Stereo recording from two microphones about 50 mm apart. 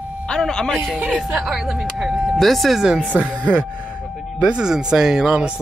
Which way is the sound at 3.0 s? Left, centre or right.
Right.